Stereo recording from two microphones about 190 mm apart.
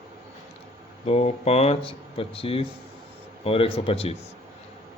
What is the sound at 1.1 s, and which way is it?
Speech, 35° left (ahead or behind).